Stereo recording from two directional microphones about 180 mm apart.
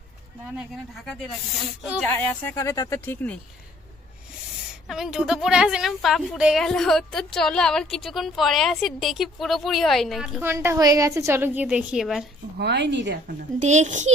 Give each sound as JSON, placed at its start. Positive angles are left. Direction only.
{"t": 2.0, "sound": "speech", "side_deg": 10}
{"t": 4.9, "sound": "a woman's voice", "side_deg": -5}
{"t": 10.4, "sound": "a woman's voice", "side_deg": -15}
{"t": 12.5, "sound": "speech", "side_deg": -70}
{"t": 13.2, "sound": "a child's voice", "side_deg": -40}